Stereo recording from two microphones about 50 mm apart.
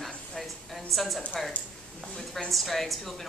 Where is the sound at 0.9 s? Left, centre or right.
Centre.